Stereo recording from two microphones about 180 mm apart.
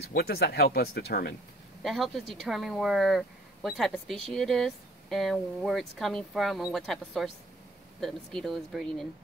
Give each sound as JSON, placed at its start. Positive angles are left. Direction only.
{"t": 0.1, "sound": "speech", "side_deg": 60}
{"t": 1.8, "sound": "a woman's voice", "side_deg": 0}